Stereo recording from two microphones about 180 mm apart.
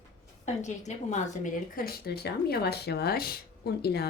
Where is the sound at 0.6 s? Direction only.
40° left (ahead or behind).